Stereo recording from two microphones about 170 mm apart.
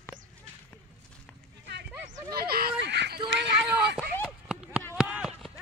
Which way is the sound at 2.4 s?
65° right (ahead or behind).